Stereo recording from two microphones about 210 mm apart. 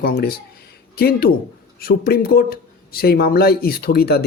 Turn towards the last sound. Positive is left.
turn(degrees=50)  # may be behind; listen again after turning